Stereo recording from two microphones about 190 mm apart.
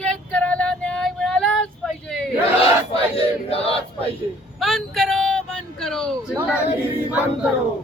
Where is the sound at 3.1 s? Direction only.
30° left (ahead or behind).